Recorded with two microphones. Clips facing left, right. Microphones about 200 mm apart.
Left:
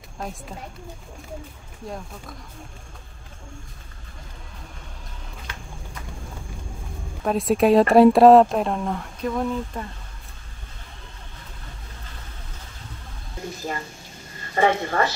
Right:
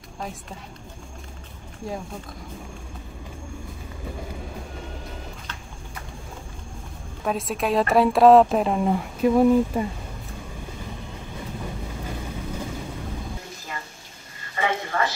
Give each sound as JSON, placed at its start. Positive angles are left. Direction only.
{"t": 1.8, "sound": "speech", "side_deg": 0}
{"t": 7.2, "sound": "speech", "side_deg": 0}
{"t": 14.5, "sound": "a sound", "side_deg": 40}